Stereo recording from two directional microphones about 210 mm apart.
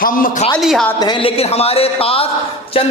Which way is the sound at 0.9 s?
20° left (ahead or behind).